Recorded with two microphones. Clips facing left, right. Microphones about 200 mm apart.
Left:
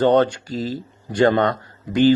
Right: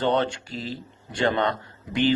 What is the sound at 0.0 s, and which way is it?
Speech, 45° left (ahead or behind).